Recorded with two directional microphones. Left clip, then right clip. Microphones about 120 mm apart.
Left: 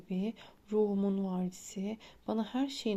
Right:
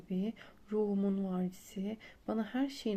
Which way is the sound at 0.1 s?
25° left (ahead or behind).